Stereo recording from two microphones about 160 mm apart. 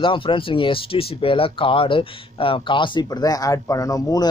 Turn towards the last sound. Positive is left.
turn(degrees=25)  # may be behind; listen again after turning